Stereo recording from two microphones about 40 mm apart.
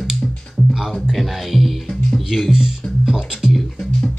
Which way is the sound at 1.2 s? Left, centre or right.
Centre.